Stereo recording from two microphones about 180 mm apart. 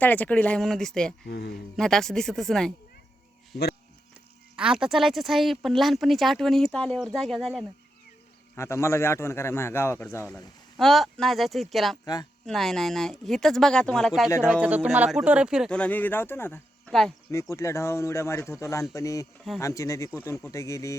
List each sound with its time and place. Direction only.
0.0 s a woman's voice: 10° left (ahead or behind)
1.2 s speech: 65° left (ahead or behind)
1.7 s a woman's voice: 5° left (ahead or behind)
4.5 s a woman's voice: 5° right (ahead or behind)
8.5 s a man's voice: 15° left (ahead or behind)
14.3 s a man's voice: 15° left (ahead or behind)
14.5 s a woman's voice: 10° right (ahead or behind); by 16.9 s 10° left (ahead or behind)
16.9 s a woman's voice: centre (ahead or behind)
17.5 s a man's voice: 15° left (ahead or behind)